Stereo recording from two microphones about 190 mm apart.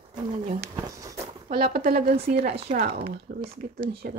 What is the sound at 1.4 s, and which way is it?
Speech, 50° right (ahead or behind).